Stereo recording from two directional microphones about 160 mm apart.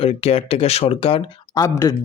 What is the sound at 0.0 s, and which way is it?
Speech, 40° left (ahead or behind).